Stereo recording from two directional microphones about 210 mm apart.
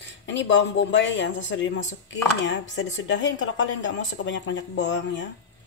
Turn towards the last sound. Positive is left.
turn(degrees=60)  # may be behind; listen again after turning